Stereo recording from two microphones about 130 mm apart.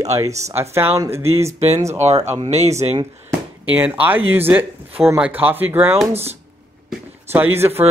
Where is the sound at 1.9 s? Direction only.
60° right (ahead or behind).